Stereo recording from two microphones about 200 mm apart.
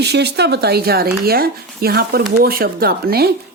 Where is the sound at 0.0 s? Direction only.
55° right (ahead or behind).